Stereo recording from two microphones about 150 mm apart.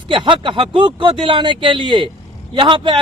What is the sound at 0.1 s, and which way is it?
Speech, 35° right (ahead or behind).